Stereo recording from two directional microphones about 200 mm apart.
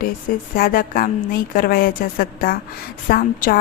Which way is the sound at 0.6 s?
45° left (ahead or behind).